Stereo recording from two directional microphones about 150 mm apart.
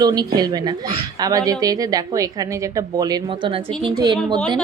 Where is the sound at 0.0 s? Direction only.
25° right (ahead or behind).